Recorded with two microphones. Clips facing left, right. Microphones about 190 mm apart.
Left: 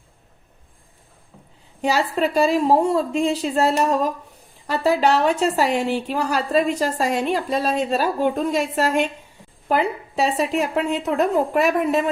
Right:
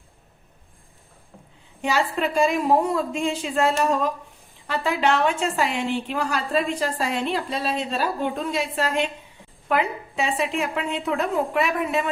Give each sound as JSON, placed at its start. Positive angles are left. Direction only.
{"t": 1.8, "sound": "a woman's voice", "side_deg": 35}
{"t": 9.6, "sound": "a woman's voice", "side_deg": 35}